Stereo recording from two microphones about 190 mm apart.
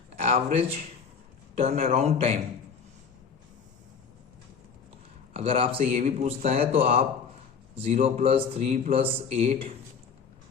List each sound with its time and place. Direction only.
0.2 s a man's voice: 35° right (ahead or behind)
5.3 s a man's voice: 30° right (ahead or behind)
7.8 s a man's voice: 30° right (ahead or behind)